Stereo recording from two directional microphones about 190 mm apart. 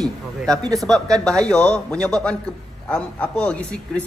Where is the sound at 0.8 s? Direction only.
Centre (ahead or behind).